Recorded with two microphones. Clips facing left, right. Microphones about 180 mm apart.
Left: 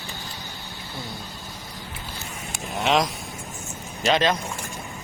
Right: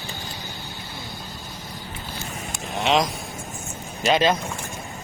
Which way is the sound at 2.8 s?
Centre (ahead or behind).